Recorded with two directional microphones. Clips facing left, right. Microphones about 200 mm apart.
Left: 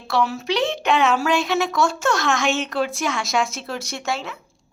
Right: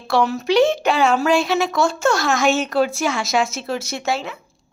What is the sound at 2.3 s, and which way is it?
Speech, 35° right (ahead or behind).